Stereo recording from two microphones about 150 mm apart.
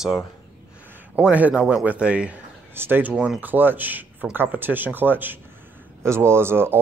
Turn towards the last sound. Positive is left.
turn(degrees=-15)  # may be behind; listen again after turning